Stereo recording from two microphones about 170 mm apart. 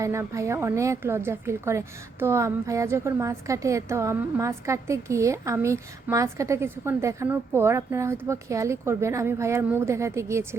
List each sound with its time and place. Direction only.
0.0 s a woman's voice: 15° right (ahead or behind)